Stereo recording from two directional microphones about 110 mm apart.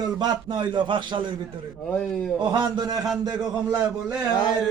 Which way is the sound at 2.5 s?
40° right (ahead or behind).